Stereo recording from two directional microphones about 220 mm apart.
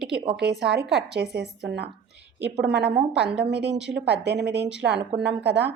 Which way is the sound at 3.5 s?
50° right (ahead or behind).